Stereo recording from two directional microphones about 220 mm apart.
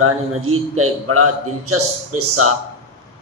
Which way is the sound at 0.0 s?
75° right (ahead or behind).